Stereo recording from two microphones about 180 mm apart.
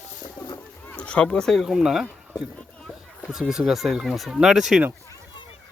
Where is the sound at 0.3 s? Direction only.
20° left (ahead or behind).